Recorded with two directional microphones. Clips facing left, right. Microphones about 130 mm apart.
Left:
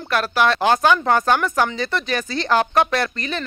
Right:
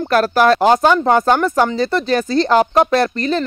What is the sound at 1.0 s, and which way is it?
Speech, 20° right (ahead or behind).